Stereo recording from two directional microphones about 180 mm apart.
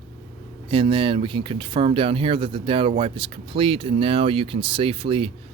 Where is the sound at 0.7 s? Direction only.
30° right (ahead or behind).